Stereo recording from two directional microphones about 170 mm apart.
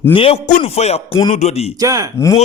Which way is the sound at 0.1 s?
30° left (ahead or behind).